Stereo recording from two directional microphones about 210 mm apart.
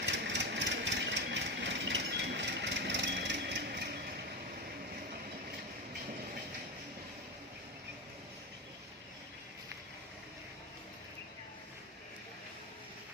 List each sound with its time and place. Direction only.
0.0 s vehicle: 55° right (ahead or behind)